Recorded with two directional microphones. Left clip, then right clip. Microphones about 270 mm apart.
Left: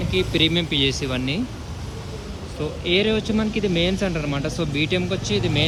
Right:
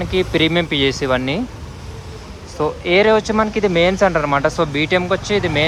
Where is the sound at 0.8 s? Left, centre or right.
Centre.